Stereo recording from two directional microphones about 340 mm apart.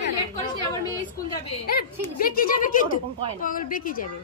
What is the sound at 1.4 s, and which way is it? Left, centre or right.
Speech, left.